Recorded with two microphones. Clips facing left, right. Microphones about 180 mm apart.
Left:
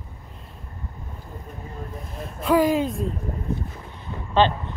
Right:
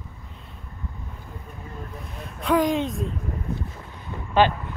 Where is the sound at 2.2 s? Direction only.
Centre (ahead or behind).